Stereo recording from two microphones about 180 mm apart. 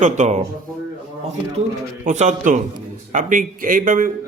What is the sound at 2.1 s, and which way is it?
A man's voice, 40° right (ahead or behind).